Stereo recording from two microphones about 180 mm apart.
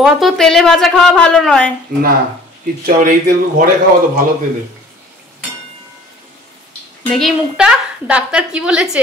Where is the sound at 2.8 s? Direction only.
55° right (ahead or behind).